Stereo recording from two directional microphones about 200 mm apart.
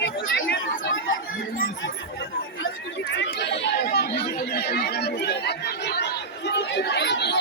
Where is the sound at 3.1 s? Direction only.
60° left (ahead or behind).